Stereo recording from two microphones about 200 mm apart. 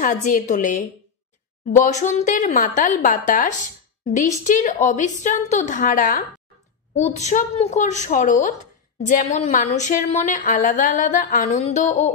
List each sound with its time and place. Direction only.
0.0 s a woman's voice: 40° left (ahead or behind)
1.9 s a woman's voice: 35° left (ahead or behind)